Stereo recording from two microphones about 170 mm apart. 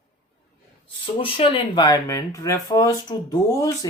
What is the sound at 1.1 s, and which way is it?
Speech, 30° left (ahead or behind).